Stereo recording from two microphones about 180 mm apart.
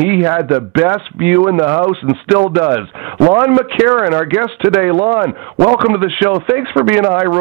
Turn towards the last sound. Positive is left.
turn(degrees=-15)  # may be behind; listen again after turning